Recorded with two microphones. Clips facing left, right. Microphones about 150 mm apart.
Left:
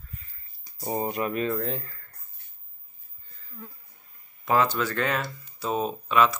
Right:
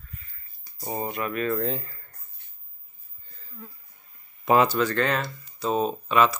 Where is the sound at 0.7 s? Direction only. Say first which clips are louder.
Left 2 dB; centre (ahead or behind).